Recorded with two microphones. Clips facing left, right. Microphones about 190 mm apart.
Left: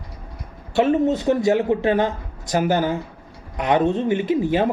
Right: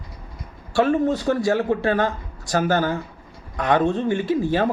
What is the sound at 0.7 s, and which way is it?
A man's voice, 20° left (ahead or behind).